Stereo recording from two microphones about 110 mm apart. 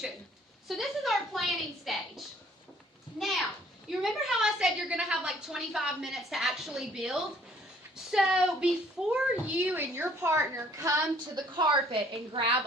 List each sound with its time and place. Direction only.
0.7 s a woman's voice: centre (ahead or behind)
3.8 s a woman's voice: 5° right (ahead or behind); by 10.9 s 30° right (ahead or behind)
11.3 s a woman's voice: 45° right (ahead or behind)